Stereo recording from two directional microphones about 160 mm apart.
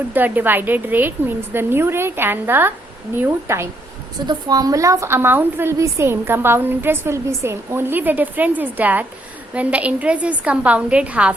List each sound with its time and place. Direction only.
0.1 s a woman's voice: 10° right (ahead or behind)